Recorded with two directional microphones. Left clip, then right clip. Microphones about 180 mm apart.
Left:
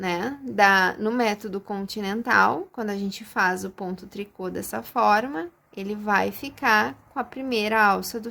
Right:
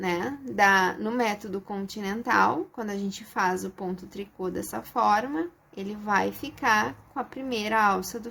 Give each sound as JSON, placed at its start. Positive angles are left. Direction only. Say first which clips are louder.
{"t": 0.0, "sound": "a woman's voice", "louder": "left 2 dB", "side_deg": 30}